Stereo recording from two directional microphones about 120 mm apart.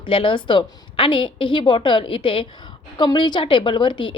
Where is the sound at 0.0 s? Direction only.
45° left (ahead or behind).